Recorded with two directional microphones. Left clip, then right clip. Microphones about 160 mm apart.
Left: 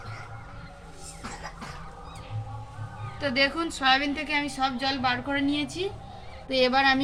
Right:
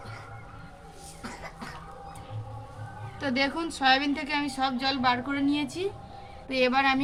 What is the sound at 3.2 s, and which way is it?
A woman's voice, 5° right (ahead or behind).